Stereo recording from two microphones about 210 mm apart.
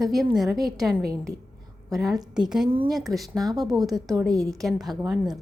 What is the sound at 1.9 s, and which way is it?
A woman's voice, centre (ahead or behind).